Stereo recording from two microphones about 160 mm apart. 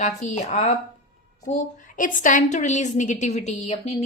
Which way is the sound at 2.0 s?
55° left (ahead or behind).